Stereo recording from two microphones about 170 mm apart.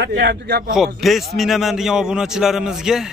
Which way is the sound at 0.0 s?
85° right.